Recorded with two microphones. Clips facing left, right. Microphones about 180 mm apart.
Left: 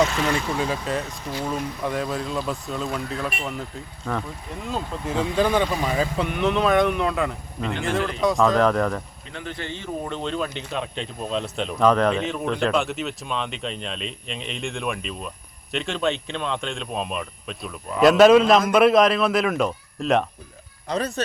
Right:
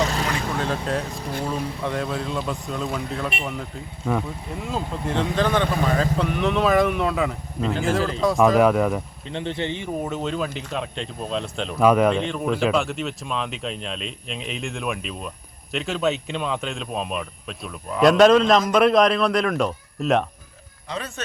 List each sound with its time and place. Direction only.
0.6 s speech: 5° left (ahead or behind)
4.6 s speech: centre (ahead or behind)
9.3 s speech: 25° right (ahead or behind); by 20.2 s centre (ahead or behind)
20.8 s speech: 40° left (ahead or behind)